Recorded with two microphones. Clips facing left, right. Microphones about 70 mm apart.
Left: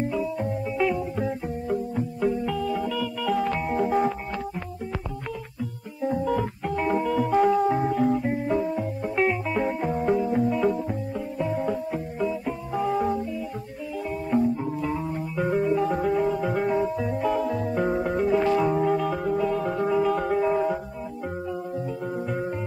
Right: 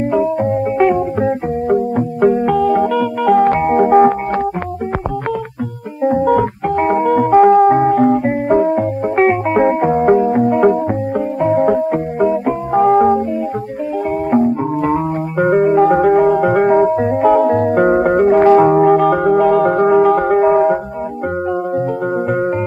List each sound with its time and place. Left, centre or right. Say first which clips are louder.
0.1 s music: right 13 dB; right
6.0 s music: right 12 dB; right
14.3 s music: right 8 dB; right